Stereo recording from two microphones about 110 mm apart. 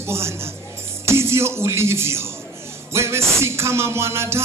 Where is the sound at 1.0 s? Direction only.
25° right (ahead or behind).